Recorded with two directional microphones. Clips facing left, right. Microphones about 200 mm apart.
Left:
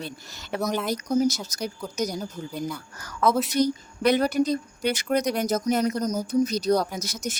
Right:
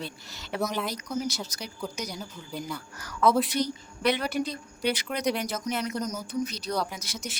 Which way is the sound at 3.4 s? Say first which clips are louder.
Left 6 dB; 45° left (ahead or behind).